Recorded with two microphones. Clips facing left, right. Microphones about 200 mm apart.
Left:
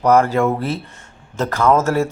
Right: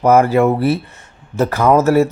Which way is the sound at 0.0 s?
15° right (ahead or behind).